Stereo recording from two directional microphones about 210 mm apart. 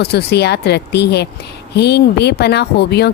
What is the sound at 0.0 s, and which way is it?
Speech, 50° left (ahead or behind).